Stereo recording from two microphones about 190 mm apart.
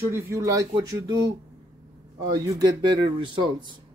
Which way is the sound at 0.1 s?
15° right (ahead or behind).